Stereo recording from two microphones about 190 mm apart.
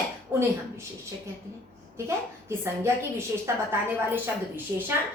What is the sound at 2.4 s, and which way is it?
Speech, 15° right (ahead or behind).